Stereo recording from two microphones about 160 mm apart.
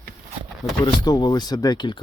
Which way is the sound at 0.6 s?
25° left (ahead or behind).